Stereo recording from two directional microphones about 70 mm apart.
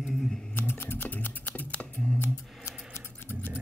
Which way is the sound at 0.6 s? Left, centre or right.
Left.